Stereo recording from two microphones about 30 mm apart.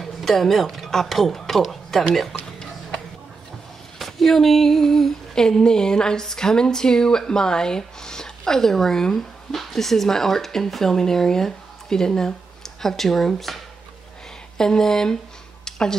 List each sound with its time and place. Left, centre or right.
0.0 s speech: centre
4.0 s female singing: centre
5.3 s speech: left
12.6 s speech: centre
14.6 s speech: centre
15.6 s a sound: centre